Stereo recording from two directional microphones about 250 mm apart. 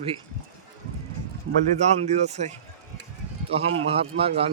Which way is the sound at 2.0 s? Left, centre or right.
Right.